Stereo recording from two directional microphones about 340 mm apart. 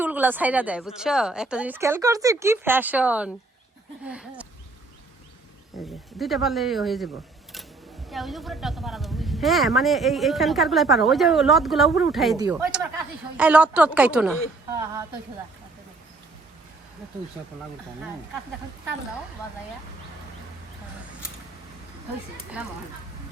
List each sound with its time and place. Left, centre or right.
0.0 s speech: centre
6.1 s speech: centre
8.1 s speech: centre